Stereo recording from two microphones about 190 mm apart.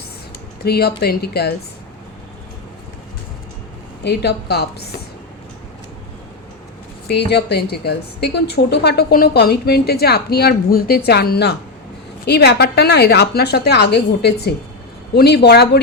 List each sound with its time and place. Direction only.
0.6 s a woman's voice: 55° left (ahead or behind)
4.0 s a woman's voice: 60° left (ahead or behind)
7.1 s a woman's voice: 60° left (ahead or behind)